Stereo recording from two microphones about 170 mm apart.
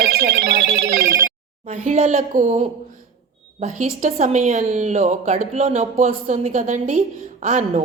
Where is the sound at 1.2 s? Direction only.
45° right (ahead or behind).